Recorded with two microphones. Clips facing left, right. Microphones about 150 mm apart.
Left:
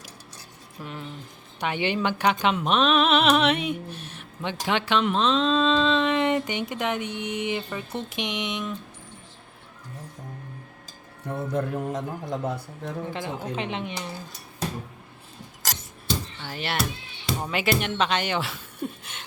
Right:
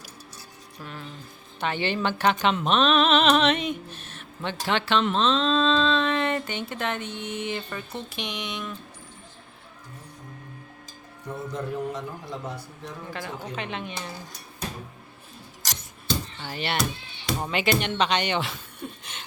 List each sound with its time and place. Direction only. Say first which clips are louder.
0.8 s speech: left 3 dB; 20° left (ahead or behind)
11.5 s a man's voice: left 3 dB; 50° left (ahead or behind)
13.1 s speech: left 3 dB; 25° left (ahead or behind)
16.0 s a sound: right 1 dB; centre (ahead or behind)
17.5 s speech: even; 5° left (ahead or behind)